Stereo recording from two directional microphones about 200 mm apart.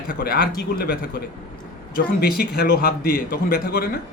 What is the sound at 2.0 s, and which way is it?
Speech, 55° left (ahead or behind).